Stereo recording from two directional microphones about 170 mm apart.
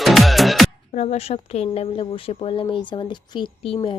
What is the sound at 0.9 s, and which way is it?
Speech, 40° left (ahead or behind).